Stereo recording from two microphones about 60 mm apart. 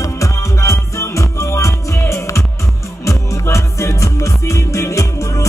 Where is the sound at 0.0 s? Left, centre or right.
Left.